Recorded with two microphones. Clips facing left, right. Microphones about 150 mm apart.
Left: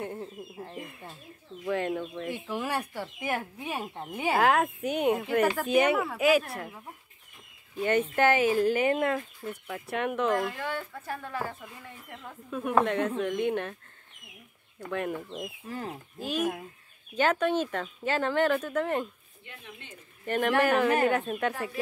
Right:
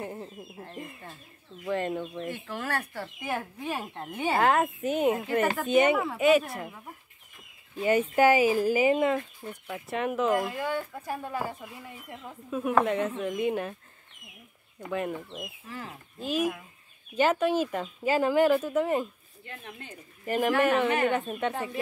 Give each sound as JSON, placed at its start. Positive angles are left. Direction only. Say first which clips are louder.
{"t": 0.0, "sound": "speech", "louder": "left 1 dB", "side_deg": 0}
{"t": 2.3, "sound": "speech", "louder": "left 4 dB", "side_deg": 15}
{"t": 10.4, "sound": "speech", "louder": "right 2 dB", "side_deg": -15}
{"t": 14.9, "sound": "speech", "louder": "even", "side_deg": -5}
{"t": 15.7, "sound": "speech", "louder": "left 5 dB", "side_deg": 35}
{"t": 16.2, "sound": "speech", "louder": "right 2 dB", "side_deg": 0}
{"t": 19.4, "sound": "speech", "louder": "right 4 dB", "side_deg": -45}
{"t": 20.2, "sound": "speech", "louder": "right 1 dB", "side_deg": -5}